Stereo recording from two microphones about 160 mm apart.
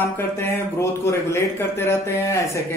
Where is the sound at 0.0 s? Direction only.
15° left (ahead or behind).